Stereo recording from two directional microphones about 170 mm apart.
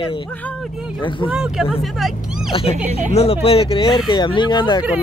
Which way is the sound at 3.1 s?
35° left (ahead or behind).